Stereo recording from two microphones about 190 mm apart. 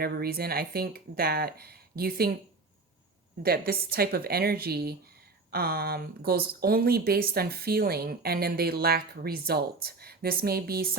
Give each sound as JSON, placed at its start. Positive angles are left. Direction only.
{"t": 0.0, "sound": "speech", "side_deg": -55}
{"t": 3.4, "sound": "speech", "side_deg": -55}